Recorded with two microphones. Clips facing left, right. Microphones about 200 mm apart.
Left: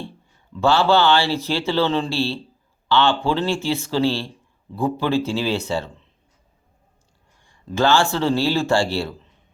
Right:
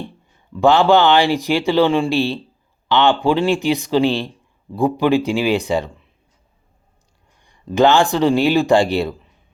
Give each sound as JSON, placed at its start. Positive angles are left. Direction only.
{"t": 0.6, "sound": "speech", "side_deg": -15}
{"t": 7.4, "sound": "speech", "side_deg": -15}